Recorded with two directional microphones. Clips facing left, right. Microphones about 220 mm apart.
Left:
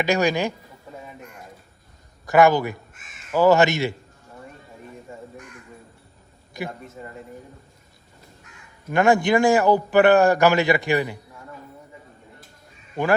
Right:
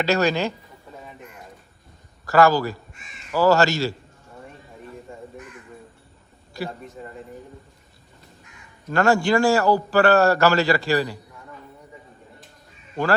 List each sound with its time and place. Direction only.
0.0 s a man's voice: 15° left (ahead or behind)
2.2 s speech: 20° left (ahead or behind)
2.9 s speech: centre (ahead or behind)
3.3 s speech: 20° left (ahead or behind)
5.1 s crow: centre (ahead or behind)
6.7 s speech: centre (ahead or behind)
8.9 s a man's voice: 20° left (ahead or behind)